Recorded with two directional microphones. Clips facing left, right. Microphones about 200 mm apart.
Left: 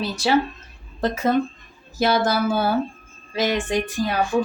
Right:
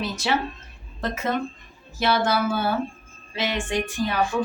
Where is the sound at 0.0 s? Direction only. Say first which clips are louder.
Left 5 dB; 35° left (ahead or behind).